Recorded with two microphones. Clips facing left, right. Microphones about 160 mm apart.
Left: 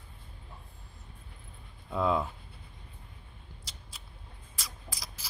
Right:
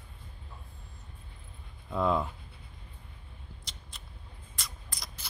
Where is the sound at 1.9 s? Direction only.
Centre (ahead or behind).